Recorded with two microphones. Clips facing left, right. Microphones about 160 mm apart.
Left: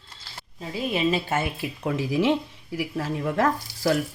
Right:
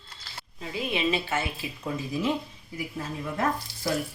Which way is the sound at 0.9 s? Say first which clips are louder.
Left 3 dB; 45° left (ahead or behind).